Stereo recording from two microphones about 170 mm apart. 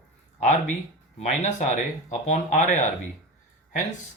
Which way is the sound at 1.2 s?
45° left (ahead or behind).